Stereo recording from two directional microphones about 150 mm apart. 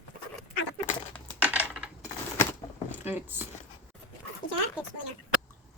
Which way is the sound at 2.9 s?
15° right (ahead or behind).